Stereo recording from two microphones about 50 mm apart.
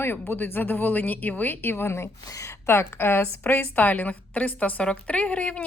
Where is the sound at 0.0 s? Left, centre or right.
Left.